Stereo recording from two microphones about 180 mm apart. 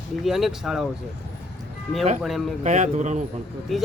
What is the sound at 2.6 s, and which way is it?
Speech, 40° right (ahead or behind).